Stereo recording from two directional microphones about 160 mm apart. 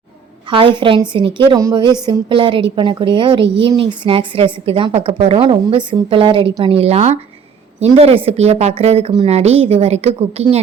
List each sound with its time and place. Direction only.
0.5 s a woman's voice: 30° right (ahead or behind)